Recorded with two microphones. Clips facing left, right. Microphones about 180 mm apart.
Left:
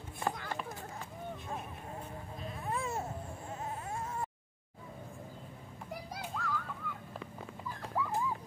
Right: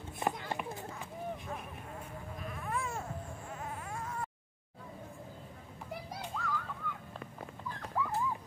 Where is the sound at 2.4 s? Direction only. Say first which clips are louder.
Left 1 dB; 25° left (ahead or behind).